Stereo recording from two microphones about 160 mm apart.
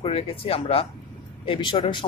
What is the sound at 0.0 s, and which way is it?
Speech, 35° left (ahead or behind).